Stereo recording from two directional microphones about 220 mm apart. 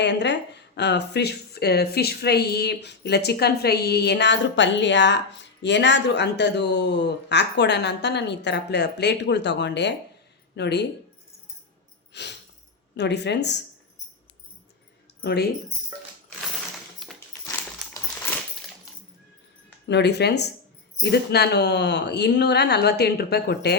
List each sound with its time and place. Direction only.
0.0 s speech: 50° left (ahead or behind)
12.1 s speech: 50° left (ahead or behind)
15.2 s speech: 45° left (ahead or behind)
17.0 s a sound: centre (ahead or behind)
17.9 s coin: 10° left (ahead or behind)
19.9 s speech: 50° left (ahead or behind)